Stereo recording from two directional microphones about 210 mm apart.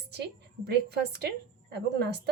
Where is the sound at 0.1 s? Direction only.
50° right (ahead or behind).